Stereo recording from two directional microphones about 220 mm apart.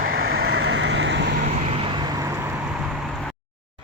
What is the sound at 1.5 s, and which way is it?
Vehicle, 25° right (ahead or behind).